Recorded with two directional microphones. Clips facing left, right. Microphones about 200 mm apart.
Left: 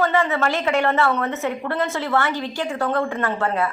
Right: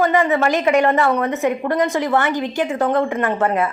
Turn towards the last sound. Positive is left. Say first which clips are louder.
# right 4 dB
turn(degrees=-20)  # may be behind; listen again after turning